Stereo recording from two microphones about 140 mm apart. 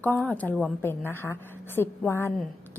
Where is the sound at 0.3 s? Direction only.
10° left (ahead or behind).